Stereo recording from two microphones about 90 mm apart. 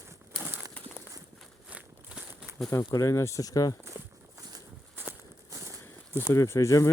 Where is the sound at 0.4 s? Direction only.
25° right (ahead or behind).